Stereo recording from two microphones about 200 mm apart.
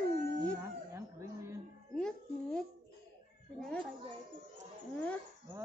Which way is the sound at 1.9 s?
5° left (ahead or behind).